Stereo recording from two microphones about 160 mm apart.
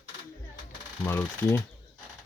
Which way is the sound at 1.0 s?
15° left (ahead or behind).